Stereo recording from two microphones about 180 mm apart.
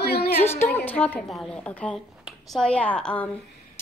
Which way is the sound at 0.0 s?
60° left (ahead or behind).